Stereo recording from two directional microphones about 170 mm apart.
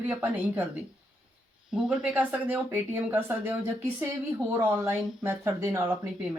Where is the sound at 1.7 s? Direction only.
5° right (ahead or behind).